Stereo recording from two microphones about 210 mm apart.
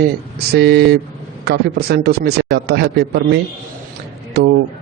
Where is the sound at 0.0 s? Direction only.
50° right (ahead or behind).